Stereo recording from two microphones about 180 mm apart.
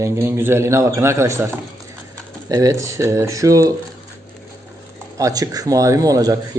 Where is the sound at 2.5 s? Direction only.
20° right (ahead or behind).